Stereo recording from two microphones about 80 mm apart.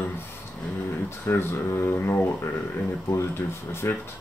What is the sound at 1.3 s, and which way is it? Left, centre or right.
Speech, left.